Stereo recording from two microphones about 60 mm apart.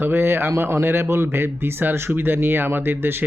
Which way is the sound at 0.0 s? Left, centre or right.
Right.